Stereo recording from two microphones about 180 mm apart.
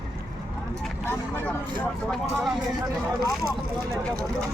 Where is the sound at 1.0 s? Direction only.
10° left (ahead or behind).